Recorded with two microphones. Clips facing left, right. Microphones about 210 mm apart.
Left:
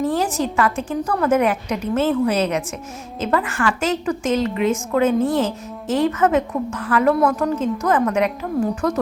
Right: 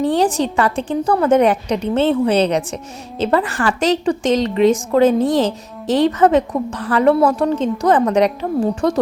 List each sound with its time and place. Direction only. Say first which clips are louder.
0.0 s a woman's voice: right 4 dB; 30° right (ahead or behind)